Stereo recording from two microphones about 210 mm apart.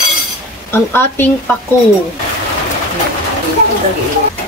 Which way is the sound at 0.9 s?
10° left (ahead or behind).